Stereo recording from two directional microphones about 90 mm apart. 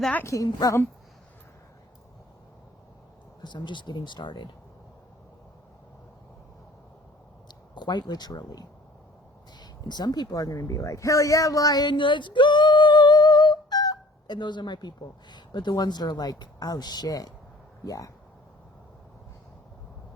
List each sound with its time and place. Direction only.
0.3 s speech: 35° left (ahead or behind)
3.4 s speech: 55° left (ahead or behind)
7.4 s speech: 55° left (ahead or behind)